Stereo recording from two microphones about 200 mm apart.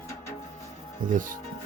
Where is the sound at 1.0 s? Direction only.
40° right (ahead or behind).